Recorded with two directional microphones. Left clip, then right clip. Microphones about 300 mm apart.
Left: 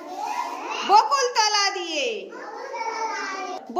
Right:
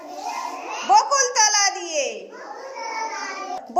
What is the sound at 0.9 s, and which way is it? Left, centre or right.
Speech, centre.